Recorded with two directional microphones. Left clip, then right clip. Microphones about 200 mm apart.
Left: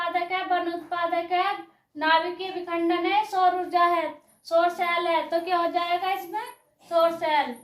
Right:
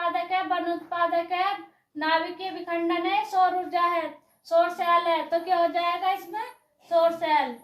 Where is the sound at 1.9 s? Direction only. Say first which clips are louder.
Left 3 dB; 15° left (ahead or behind).